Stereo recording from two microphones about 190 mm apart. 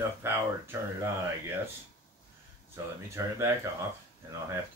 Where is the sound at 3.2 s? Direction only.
15° right (ahead or behind).